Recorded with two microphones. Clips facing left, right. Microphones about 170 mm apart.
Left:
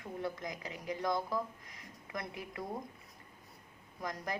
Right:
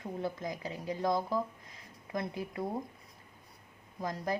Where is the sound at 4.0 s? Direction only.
30° right (ahead or behind).